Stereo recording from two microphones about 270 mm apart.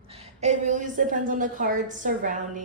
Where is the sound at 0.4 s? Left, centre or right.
Right.